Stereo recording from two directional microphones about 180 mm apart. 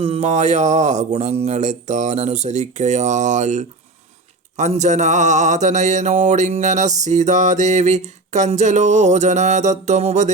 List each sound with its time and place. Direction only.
0.0 s speech: 35° right (ahead or behind)